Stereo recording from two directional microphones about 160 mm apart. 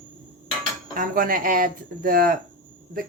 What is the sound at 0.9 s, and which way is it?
A woman's voice, 60° right (ahead or behind).